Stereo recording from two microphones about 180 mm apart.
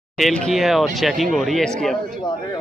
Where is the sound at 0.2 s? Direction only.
Centre (ahead or behind).